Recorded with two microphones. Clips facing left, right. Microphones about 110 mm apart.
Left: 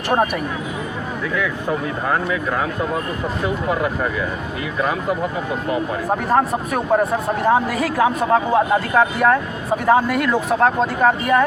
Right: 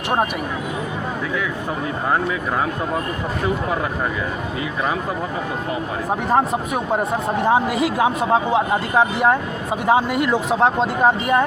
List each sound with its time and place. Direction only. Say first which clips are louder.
6.3 s speech: even; 15° right (ahead or behind)